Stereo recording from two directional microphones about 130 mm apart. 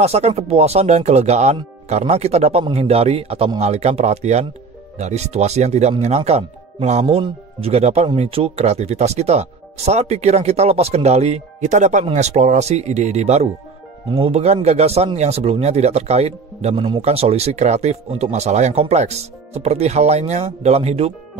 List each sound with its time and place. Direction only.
0.0 s speech: 55° right (ahead or behind)